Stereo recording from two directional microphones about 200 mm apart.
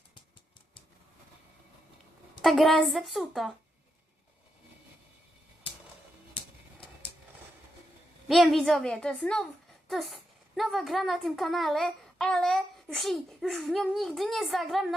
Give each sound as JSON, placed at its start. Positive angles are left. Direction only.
{"t": 2.4, "sound": "a woman's voice", "side_deg": 0}
{"t": 8.3, "sound": "a woman's voice", "side_deg": 0}